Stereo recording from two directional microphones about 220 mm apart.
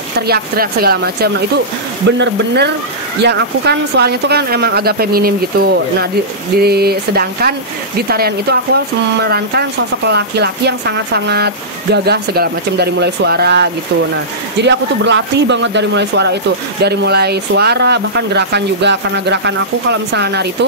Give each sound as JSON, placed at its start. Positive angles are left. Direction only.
{"t": 0.3, "sound": "speech", "side_deg": -45}